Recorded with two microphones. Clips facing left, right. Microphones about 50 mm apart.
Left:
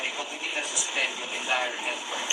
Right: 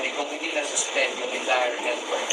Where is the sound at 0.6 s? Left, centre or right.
Left.